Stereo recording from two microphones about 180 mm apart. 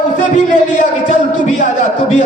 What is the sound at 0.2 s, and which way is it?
Music, 45° left (ahead or behind).